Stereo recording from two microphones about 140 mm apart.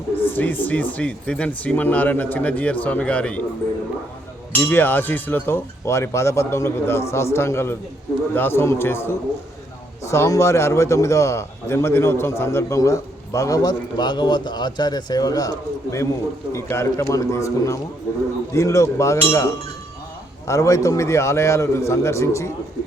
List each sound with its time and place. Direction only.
0.2 s speech: 15° left (ahead or behind)
4.5 s a man's voice: 15° left (ahead or behind)